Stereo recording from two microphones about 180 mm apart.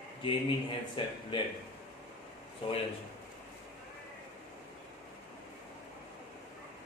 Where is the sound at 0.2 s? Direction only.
25° left (ahead or behind).